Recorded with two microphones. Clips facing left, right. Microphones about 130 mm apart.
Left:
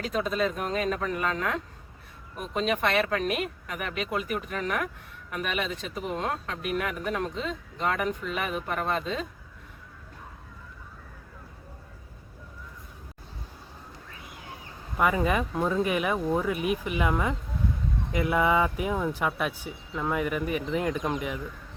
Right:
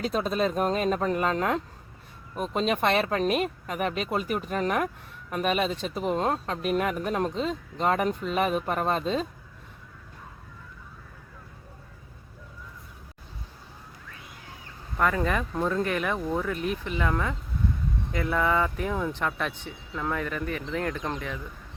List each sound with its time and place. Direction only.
0.0 s speech: 35° right (ahead or behind)
14.9 s speech: 10° left (ahead or behind)